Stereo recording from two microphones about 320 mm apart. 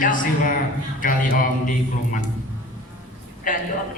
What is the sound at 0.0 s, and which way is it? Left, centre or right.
A woman's voice, left.